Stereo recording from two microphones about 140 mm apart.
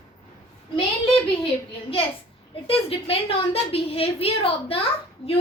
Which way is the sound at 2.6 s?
45° left (ahead or behind).